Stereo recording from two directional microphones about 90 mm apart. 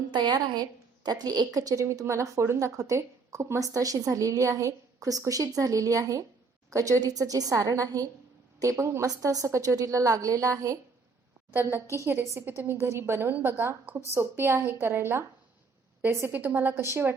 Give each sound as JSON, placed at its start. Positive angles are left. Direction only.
{"t": 0.1, "sound": "a woman's voice", "side_deg": -60}
{"t": 11.5, "sound": "a woman's voice", "side_deg": -30}